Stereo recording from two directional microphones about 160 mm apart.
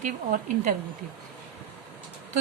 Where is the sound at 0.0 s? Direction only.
55° right (ahead or behind).